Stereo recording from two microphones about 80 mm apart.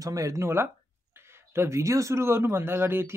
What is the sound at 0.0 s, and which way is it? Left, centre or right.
A man's voice, right.